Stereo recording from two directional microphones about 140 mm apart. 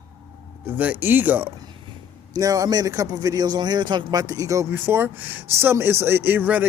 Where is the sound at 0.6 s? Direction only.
10° right (ahead or behind).